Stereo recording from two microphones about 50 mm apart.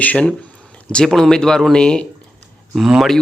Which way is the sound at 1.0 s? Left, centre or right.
Centre.